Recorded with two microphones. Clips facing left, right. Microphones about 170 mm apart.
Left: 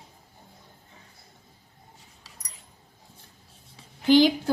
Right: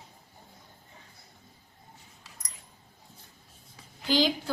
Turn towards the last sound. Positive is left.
turn(degrees=55)  # may be behind; listen again after turning